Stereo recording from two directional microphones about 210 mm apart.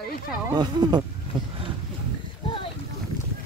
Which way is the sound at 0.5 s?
20° right (ahead or behind).